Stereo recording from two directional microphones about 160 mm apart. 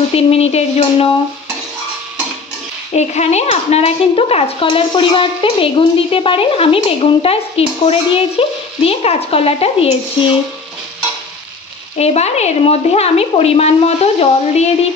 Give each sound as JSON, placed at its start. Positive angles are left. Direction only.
{"t": 0.1, "sound": "speech", "side_deg": 40}
{"t": 2.9, "sound": "speech", "side_deg": 45}
{"t": 12.0, "sound": "speech", "side_deg": 40}